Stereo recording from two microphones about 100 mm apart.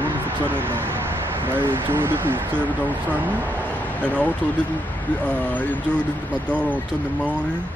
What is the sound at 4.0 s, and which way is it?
Speech, 15° left (ahead or behind).